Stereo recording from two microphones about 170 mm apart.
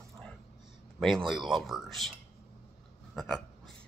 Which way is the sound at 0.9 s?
Centre (ahead or behind).